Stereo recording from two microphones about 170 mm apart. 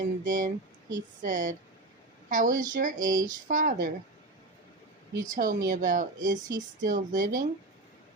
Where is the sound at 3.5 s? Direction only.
55° right (ahead or behind).